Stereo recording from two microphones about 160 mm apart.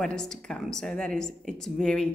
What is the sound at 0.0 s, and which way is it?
A woman's voice, 5° left (ahead or behind).